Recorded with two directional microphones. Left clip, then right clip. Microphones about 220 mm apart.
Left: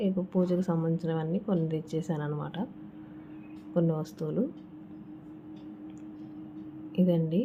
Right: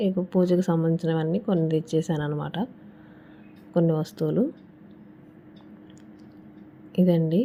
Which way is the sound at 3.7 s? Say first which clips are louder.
Right 6 dB; 20° right (ahead or behind).